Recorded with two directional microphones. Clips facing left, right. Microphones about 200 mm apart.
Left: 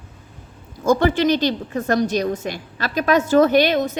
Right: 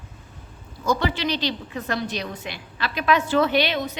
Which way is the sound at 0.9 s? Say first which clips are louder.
Left 7 dB; 50° left (ahead or behind).